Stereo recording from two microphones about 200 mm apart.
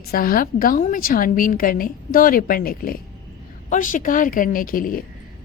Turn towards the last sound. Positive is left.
turn(degrees=45)  # may be behind; listen again after turning